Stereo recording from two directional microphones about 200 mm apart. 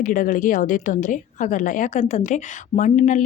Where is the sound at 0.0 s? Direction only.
40° left (ahead or behind).